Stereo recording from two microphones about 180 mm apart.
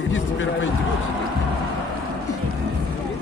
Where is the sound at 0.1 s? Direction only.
90° left.